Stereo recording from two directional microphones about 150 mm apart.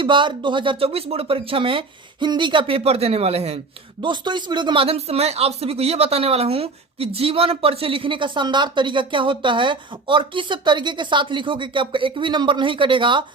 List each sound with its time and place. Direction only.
0.0 s speech: 35° right (ahead or behind)
4.0 s speech: 30° right (ahead or behind)